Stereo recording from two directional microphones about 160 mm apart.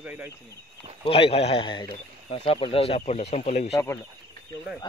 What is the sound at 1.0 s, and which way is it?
Speech, 35° left (ahead or behind).